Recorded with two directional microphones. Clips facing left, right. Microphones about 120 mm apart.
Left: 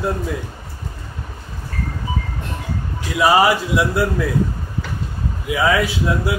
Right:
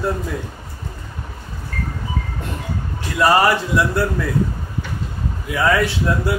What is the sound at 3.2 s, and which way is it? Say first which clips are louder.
Speech: left 1 dB; 10° left (ahead or behind).